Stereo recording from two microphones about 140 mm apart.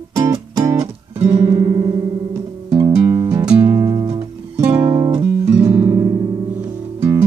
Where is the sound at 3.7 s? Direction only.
30° right (ahead or behind).